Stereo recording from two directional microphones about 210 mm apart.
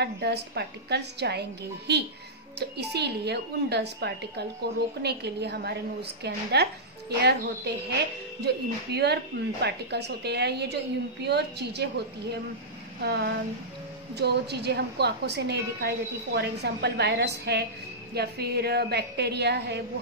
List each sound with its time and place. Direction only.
0.0 s a woman's voice: 50° right (ahead or behind)
13.0 s a woman's voice: 50° right (ahead or behind)